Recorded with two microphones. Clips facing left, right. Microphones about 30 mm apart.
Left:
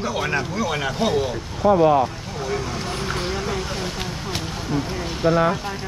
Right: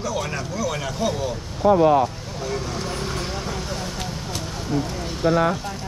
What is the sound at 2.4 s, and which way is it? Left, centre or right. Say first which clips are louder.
Speech: left 1 dB; centre.